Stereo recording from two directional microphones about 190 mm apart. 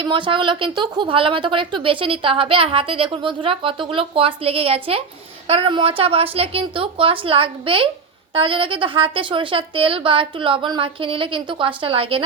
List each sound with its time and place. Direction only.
0.0 s a woman's voice: 25° right (ahead or behind)